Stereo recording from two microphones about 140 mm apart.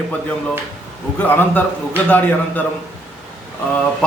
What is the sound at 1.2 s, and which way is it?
A man's voice, 10° left (ahead or behind).